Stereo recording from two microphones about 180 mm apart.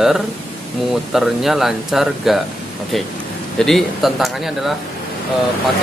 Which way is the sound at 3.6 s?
Centre (ahead or behind).